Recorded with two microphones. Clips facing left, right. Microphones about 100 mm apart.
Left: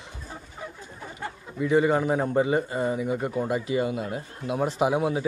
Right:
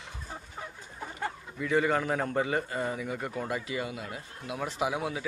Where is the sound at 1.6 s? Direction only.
20° left (ahead or behind).